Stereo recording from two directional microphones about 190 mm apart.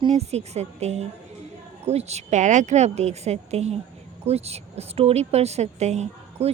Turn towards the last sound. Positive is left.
turn(degrees=-35)  # may be behind; listen again after turning